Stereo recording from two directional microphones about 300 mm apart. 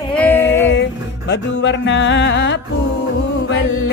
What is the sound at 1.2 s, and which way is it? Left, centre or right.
Music, left.